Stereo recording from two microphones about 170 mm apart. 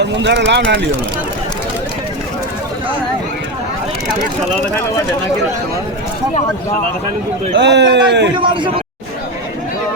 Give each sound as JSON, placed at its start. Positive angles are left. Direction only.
{"t": 0.0, "sound": "speech", "side_deg": -90}
{"t": 7.5, "sound": "speech", "side_deg": -90}
{"t": 8.4, "sound": "a man's voice", "side_deg": -30}